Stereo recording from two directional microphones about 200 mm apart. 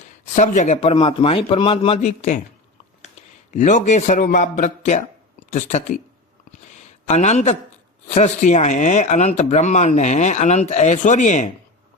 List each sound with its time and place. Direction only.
0.3 s a man's voice: 35° left (ahead or behind)
3.5 s speech: 40° left (ahead or behind)
7.1 s speech: 35° left (ahead or behind)